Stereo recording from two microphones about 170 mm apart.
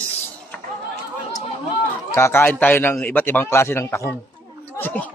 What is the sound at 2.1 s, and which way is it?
A man's voice, 15° left (ahead or behind).